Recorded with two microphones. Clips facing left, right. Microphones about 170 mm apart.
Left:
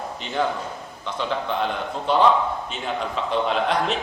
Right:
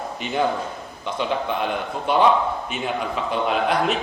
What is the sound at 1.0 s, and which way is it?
A man's voice, 15° right (ahead or behind).